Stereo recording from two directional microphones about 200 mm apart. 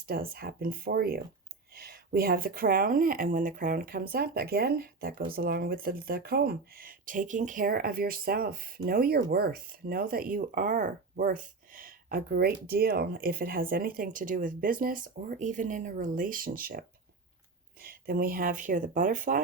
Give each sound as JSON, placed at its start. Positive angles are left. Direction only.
{"t": 0.1, "sound": "speech", "side_deg": -50}
{"t": 17.8, "sound": "speech", "side_deg": -45}